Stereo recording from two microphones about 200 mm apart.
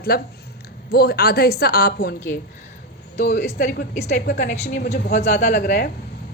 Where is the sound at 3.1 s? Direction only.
40° left (ahead or behind).